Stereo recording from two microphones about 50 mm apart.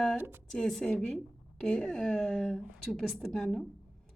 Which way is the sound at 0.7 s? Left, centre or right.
Centre.